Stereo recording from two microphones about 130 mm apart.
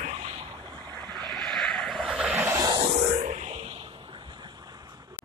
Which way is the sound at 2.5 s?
30° right (ahead or behind).